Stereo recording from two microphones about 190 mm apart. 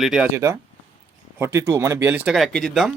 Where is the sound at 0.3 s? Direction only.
15° right (ahead or behind).